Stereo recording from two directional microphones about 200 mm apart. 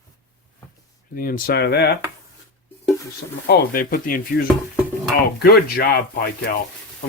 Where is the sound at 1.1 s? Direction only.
45° left (ahead or behind).